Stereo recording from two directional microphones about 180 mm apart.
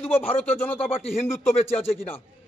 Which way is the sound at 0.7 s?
35° left (ahead or behind).